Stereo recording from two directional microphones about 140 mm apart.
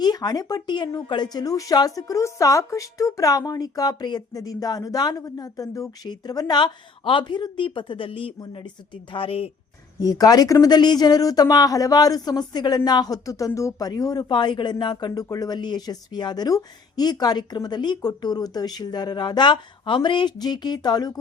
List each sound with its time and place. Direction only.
0.0 s speech: 30° left (ahead or behind)
10.0 s speech: 25° left (ahead or behind)